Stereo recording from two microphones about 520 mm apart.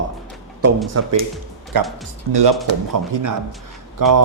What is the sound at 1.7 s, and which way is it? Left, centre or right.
Speech, right.